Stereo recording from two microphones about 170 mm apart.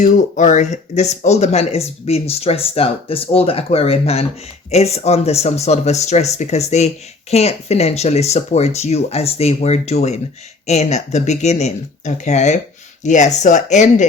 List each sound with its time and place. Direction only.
0.0 s speech: 45° left (ahead or behind)